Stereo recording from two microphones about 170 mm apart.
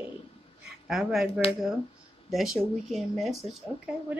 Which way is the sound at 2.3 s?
Centre (ahead or behind).